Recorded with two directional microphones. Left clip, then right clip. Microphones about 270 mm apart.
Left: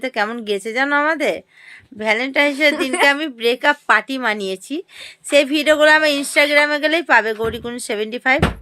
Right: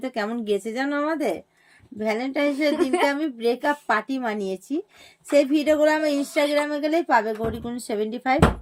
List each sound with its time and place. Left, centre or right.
0.0 s a woman's voice: centre